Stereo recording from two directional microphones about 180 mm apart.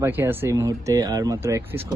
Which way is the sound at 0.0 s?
10° right (ahead or behind).